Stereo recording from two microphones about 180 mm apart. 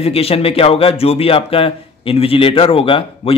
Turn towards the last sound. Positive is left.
turn(degrees=30)  # may be behind; listen again after turning